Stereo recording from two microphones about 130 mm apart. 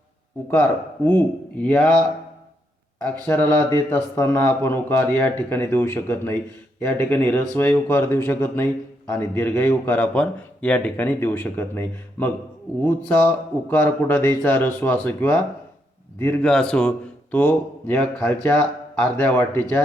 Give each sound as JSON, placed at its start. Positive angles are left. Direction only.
{"t": 1.0, "sound": "a man's voice", "side_deg": 15}
{"t": 3.0, "sound": "a man's voice", "side_deg": 15}
{"t": 16.4, "sound": "a man's voice", "side_deg": 5}